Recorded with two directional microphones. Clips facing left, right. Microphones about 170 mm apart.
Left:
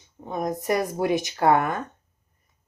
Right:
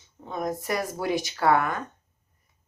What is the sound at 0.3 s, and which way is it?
Speech, 15° left (ahead or behind).